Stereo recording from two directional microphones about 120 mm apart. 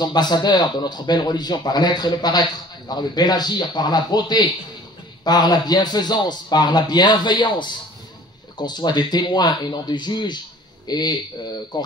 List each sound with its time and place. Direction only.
0.0 s a man's voice: 35° left (ahead or behind)